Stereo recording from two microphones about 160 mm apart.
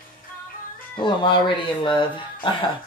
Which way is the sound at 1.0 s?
30° left (ahead or behind).